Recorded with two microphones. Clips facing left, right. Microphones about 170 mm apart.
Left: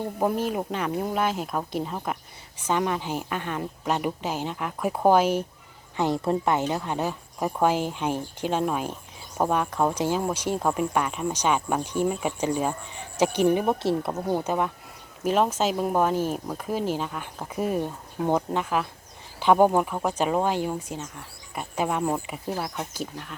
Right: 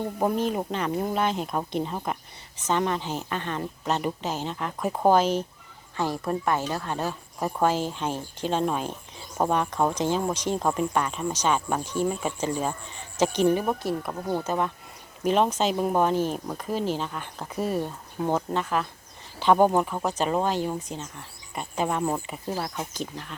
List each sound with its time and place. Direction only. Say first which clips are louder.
0.2 s speech: even; 5° left (ahead or behind)
6.0 s speech: left 3 dB; 20° left (ahead or behind)
14.3 s speech: even; 15° left (ahead or behind)